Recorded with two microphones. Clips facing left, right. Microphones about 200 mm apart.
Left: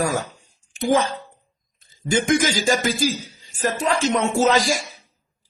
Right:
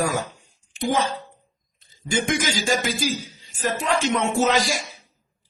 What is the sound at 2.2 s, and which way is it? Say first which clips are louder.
A man's voice: left 6 dB; 45° left (ahead or behind).